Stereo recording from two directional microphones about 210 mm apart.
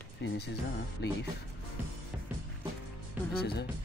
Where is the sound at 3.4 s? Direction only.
50° left (ahead or behind).